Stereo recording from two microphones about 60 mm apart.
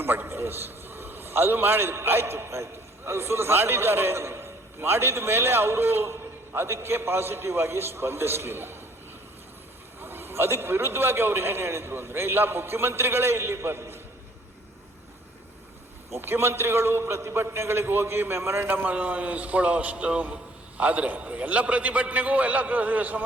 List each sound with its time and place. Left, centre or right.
0.0 s a man's voice: right
10.0 s a man's voice: right
16.1 s a man's voice: right